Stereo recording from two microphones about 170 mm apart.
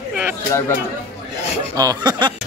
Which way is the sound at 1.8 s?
25° right (ahead or behind).